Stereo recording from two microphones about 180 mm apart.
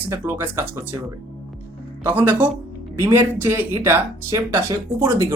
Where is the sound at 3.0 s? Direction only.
15° right (ahead or behind).